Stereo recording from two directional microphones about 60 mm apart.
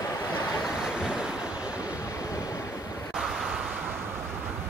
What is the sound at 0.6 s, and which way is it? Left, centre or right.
Waves, centre.